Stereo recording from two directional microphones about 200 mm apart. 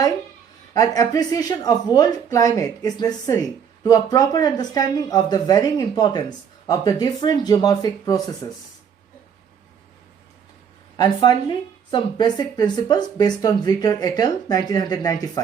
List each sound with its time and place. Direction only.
0.7 s speech: 20° left (ahead or behind)
10.9 s speech: 20° left (ahead or behind)